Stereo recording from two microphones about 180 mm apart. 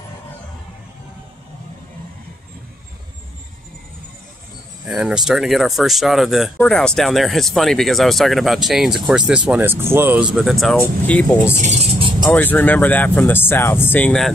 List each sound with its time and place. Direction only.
4.8 s speech: 5° right (ahead or behind)
11.5 s speech: 40° right (ahead or behind)
12.3 s speech: 10° left (ahead or behind)